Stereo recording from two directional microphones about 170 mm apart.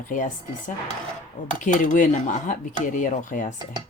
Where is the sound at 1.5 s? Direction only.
50° left (ahead or behind).